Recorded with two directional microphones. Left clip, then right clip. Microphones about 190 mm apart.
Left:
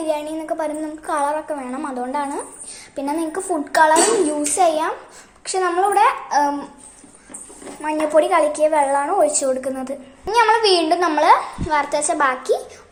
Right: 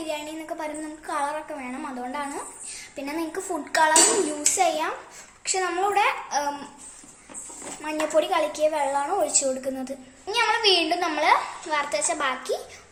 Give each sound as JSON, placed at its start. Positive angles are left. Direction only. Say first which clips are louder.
{"t": 0.0, "sound": "a sound", "louder": "left 9 dB", "side_deg": 25}
{"t": 0.5, "sound": "a child's voice", "louder": "left 9 dB", "side_deg": 25}
{"t": 7.8, "sound": "a woman's voice", "louder": "left 7 dB", "side_deg": 10}